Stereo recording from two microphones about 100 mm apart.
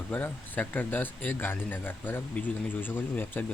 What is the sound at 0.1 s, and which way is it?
Speech, 15° left (ahead or behind).